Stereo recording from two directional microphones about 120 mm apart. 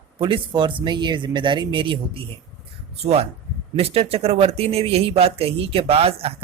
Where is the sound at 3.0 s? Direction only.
60° right (ahead or behind).